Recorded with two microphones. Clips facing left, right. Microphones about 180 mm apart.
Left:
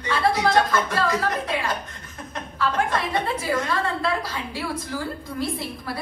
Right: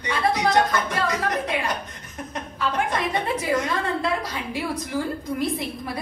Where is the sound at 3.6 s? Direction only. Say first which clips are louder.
Even; 20° right (ahead or behind).